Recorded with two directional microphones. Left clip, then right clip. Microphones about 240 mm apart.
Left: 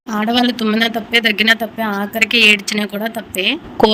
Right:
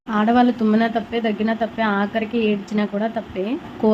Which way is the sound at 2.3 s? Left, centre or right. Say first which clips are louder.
Left 11 dB; left.